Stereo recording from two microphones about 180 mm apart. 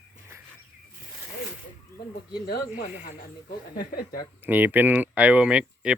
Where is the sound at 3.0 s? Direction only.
45° left (ahead or behind).